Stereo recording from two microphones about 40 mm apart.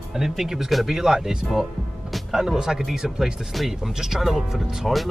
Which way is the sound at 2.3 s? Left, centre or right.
Centre.